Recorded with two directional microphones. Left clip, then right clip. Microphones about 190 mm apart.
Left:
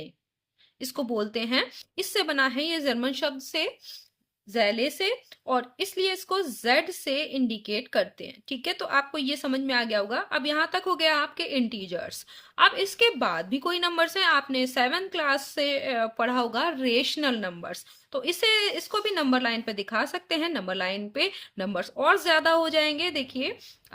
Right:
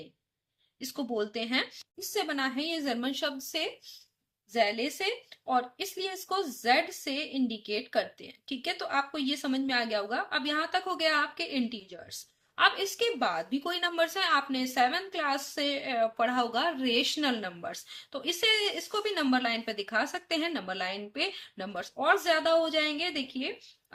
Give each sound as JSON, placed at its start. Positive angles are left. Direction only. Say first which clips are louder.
{"t": 0.8, "sound": "a woman's voice", "louder": "left 4 dB", "side_deg": 40}